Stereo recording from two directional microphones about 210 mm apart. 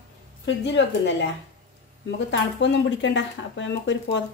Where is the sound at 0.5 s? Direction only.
60° left (ahead or behind).